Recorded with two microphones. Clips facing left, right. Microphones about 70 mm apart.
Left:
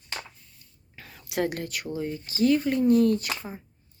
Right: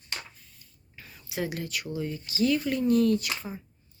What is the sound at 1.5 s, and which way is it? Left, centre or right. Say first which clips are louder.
Speech: left 1 dB; left.